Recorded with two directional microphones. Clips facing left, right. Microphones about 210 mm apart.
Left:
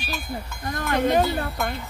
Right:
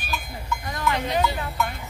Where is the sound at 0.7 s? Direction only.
50° left (ahead or behind).